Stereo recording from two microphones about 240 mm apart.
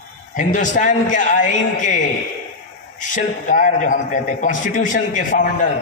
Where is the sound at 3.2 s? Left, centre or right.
Left.